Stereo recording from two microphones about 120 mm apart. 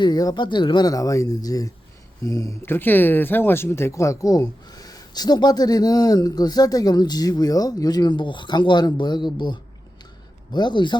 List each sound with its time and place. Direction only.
0.0 s speech: 35° left (ahead or behind)